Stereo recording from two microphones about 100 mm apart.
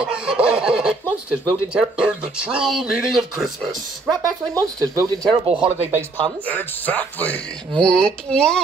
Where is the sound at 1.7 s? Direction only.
10° right (ahead or behind).